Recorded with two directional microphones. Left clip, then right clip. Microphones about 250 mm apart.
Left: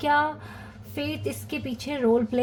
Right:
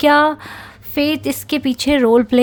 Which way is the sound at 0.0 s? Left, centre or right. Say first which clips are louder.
Right 11 dB; right.